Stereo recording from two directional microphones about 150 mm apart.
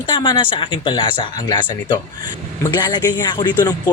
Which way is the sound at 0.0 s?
30° left (ahead or behind).